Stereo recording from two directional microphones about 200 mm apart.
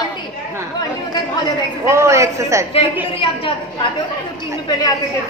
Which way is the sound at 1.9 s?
15° right (ahead or behind).